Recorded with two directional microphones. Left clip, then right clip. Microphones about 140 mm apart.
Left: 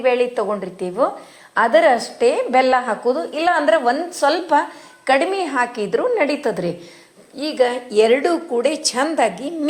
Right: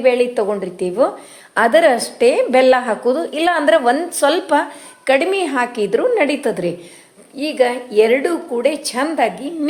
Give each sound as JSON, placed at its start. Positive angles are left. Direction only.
{"t": 0.0, "sound": "a woman's voice", "side_deg": -40}
{"t": 7.7, "sound": "a woman's voice", "side_deg": 5}